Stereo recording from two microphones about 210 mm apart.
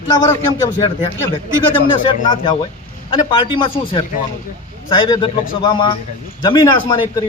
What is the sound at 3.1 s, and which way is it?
A man's voice, 20° left (ahead or behind).